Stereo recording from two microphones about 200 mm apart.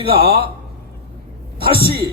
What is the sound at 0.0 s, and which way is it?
Speech, 25° right (ahead or behind).